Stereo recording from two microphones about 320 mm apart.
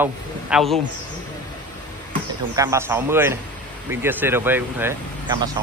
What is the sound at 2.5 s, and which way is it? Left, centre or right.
Speech, centre.